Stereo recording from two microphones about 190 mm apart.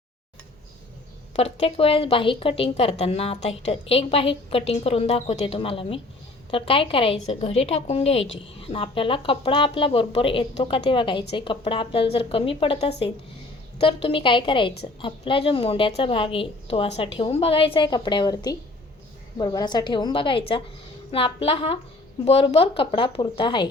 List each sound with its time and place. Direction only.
1.4 s a woman's voice: 30° left (ahead or behind)